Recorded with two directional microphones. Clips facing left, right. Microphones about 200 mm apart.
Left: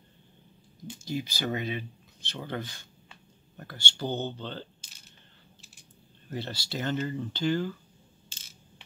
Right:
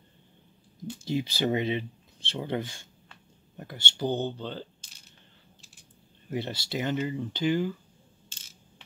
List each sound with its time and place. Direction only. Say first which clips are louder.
1.0 s speech: right 4 dB; 25° right (ahead or behind); by 4.6 s 10° right (ahead or behind)
6.3 s speech: right 3 dB; 20° right (ahead or behind)